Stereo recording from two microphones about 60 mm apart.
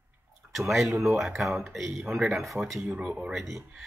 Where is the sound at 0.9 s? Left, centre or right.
Right.